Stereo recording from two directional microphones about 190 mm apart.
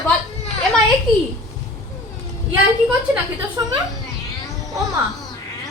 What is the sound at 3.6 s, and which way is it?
Speech, 20° right (ahead or behind).